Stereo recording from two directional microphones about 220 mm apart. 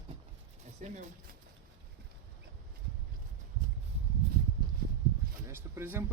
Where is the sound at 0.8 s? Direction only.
30° right (ahead or behind).